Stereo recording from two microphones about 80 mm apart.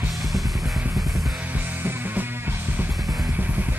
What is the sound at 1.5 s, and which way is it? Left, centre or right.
Music, right.